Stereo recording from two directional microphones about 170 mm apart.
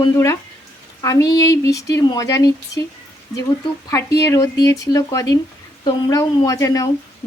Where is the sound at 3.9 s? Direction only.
20° left (ahead or behind).